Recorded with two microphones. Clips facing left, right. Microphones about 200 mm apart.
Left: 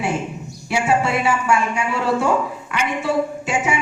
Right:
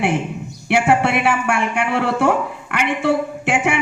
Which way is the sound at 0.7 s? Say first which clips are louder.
Right 3 dB; 65° right (ahead or behind).